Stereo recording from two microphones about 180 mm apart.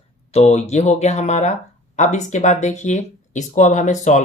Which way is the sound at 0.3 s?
35° left (ahead or behind).